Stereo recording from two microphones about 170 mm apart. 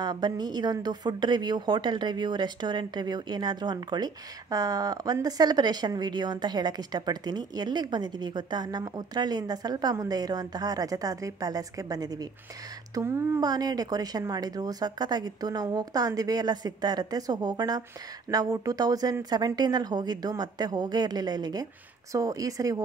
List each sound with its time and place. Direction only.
0.0 s a woman's voice: 25° right (ahead or behind)